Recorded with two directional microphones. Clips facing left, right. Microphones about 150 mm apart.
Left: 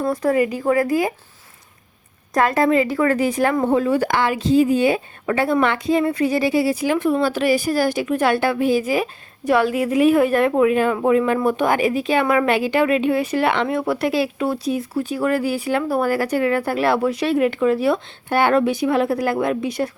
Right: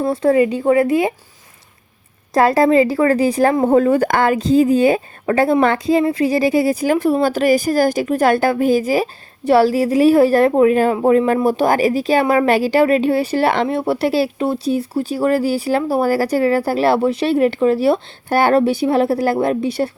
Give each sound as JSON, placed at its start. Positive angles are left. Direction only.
{"t": 0.0, "sound": "speech", "side_deg": -25}
{"t": 2.3, "sound": "a woman's voice", "side_deg": -35}